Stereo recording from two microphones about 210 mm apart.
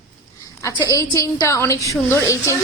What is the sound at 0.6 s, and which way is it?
A woman's voice, 15° left (ahead or behind).